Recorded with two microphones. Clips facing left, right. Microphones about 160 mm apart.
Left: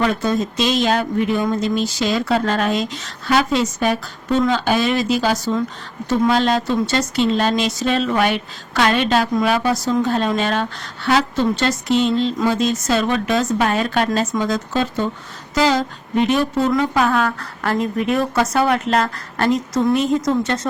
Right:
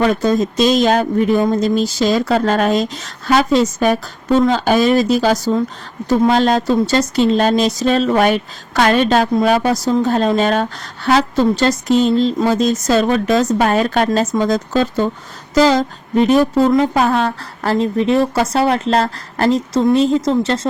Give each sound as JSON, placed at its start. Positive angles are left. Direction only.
{"t": 0.0, "sound": "speech", "side_deg": -40}